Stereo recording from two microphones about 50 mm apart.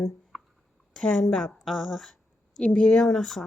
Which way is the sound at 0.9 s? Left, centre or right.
Centre.